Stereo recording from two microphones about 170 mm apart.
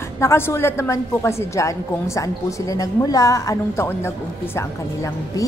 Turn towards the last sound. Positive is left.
turn(degrees=15)  # may be behind; listen again after turning